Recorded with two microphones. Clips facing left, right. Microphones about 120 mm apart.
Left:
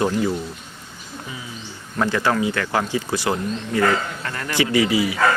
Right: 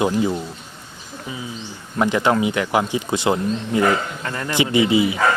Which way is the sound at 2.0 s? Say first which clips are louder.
Right 2 dB; 20° right (ahead or behind).